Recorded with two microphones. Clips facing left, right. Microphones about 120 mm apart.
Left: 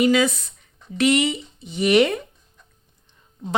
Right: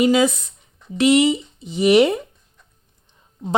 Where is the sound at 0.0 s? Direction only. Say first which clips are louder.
Right 2 dB; 15° right (ahead or behind).